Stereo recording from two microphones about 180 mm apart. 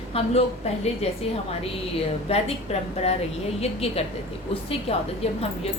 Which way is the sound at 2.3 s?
35° left (ahead or behind).